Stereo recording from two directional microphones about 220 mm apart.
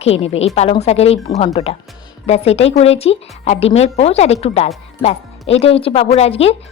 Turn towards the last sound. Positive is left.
turn(degrees=25)  # may be behind; listen again after turning